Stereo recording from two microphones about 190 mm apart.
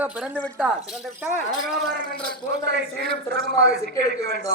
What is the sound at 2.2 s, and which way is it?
Speech, 60° right (ahead or behind).